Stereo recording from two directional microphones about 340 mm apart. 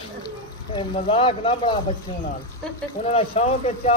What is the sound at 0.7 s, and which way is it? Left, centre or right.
Speech, centre.